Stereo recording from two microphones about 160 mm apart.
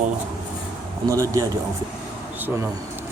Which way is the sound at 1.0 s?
30° right (ahead or behind).